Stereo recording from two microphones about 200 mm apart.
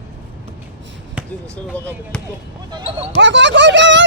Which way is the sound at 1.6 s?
5° left (ahead or behind).